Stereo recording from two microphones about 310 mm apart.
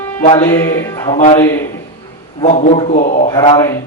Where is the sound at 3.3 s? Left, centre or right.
Centre.